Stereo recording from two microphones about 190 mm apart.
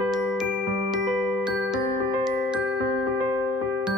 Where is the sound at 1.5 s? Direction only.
5° right (ahead or behind).